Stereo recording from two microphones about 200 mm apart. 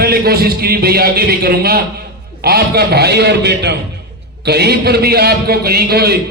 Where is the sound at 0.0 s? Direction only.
50° right (ahead or behind).